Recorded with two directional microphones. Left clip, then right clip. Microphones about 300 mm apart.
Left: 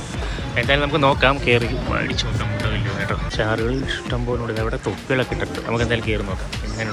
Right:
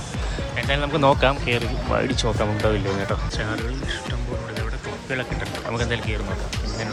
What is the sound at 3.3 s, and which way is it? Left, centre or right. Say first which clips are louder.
Speech: left 7 dB; centre.